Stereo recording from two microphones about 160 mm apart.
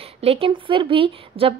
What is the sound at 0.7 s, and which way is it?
Speech, 30° right (ahead or behind).